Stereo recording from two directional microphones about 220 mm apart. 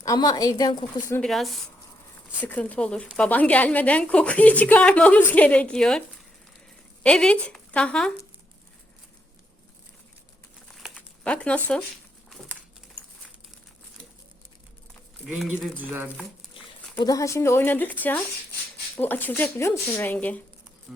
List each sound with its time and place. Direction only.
0.0 s speech: 15° left (ahead or behind)
1.1 s speech: centre (ahead or behind)
7.0 s speech: 5° left (ahead or behind)
10.8 s crumpling: centre (ahead or behind)
15.3 s speech: 5° right (ahead or behind)
16.6 s dog: 25° left (ahead or behind)
17.0 s speech: 15° left (ahead or behind)